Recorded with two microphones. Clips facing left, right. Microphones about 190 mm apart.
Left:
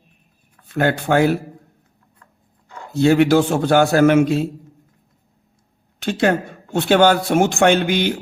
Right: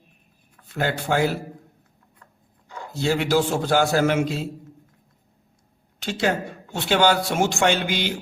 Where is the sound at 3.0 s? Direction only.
60° left (ahead or behind).